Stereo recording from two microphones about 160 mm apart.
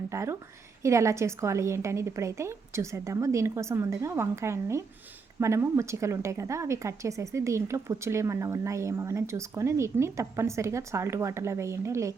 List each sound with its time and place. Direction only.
0.1 s a woman's voice: 15° right (ahead or behind)